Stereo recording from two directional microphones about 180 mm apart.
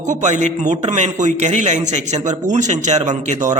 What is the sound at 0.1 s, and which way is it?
A man's voice, 45° right (ahead or behind).